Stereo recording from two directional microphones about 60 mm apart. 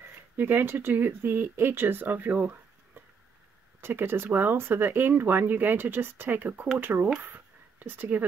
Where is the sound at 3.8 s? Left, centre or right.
Right.